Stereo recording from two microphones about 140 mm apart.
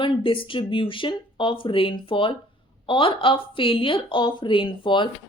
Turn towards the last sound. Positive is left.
turn(degrees=35)  # may be behind; listen again after turning